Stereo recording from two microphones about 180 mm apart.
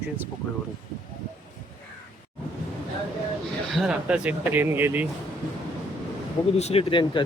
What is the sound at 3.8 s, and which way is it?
Speech, 5° right (ahead or behind).